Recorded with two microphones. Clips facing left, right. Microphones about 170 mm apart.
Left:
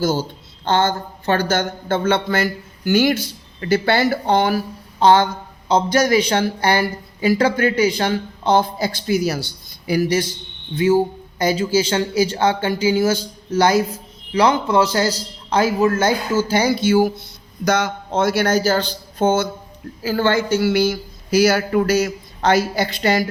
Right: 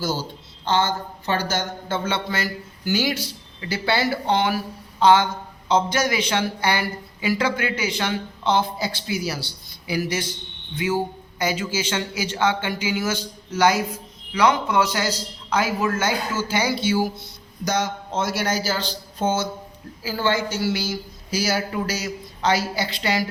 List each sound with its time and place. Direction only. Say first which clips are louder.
0.0 s a man's voice: left 6 dB; 50° left (ahead or behind)